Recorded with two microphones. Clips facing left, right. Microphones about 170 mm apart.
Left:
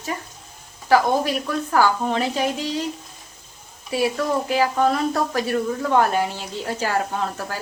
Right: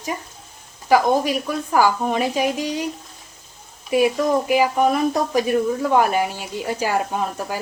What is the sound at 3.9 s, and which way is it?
Speech, 15° right (ahead or behind).